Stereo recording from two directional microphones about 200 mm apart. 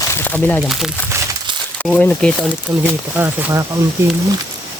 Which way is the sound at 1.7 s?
5° left (ahead or behind).